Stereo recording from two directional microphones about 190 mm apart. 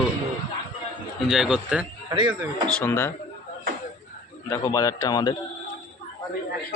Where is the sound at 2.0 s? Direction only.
25° right (ahead or behind).